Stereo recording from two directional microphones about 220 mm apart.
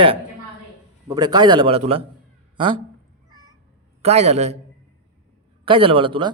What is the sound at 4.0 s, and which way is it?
Speech, 30° right (ahead or behind).